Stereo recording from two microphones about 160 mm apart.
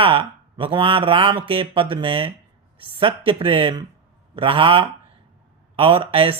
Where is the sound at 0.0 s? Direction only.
35° right (ahead or behind).